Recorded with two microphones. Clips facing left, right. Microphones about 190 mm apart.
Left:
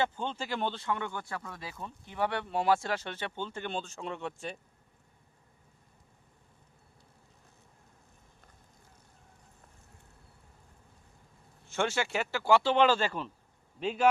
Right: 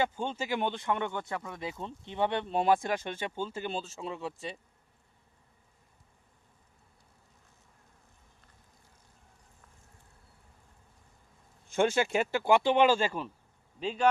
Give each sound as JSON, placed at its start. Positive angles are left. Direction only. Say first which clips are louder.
{"t": 0.0, "sound": "speech", "louder": "right 1 dB", "side_deg": -10}
{"t": 11.8, "sound": "speech", "louder": "right 4 dB", "side_deg": -15}
{"t": 13.7, "sound": "speech", "louder": "left 1 dB", "side_deg": 5}